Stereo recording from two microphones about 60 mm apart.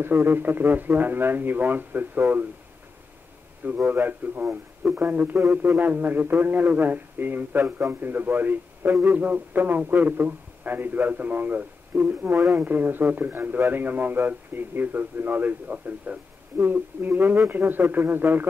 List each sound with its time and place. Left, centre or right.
0.0 s speech: right
3.6 s a man's voice: right